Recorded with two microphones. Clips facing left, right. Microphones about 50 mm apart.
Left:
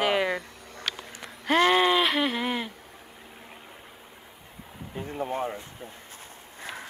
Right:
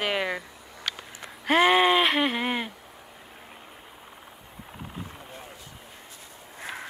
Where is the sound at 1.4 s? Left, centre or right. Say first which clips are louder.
Right 1 dB; centre.